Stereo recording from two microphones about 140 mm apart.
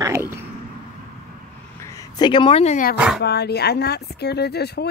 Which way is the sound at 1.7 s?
25° left (ahead or behind).